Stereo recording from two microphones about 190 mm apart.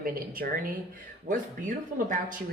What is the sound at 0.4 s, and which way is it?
Speech, 50° right (ahead or behind).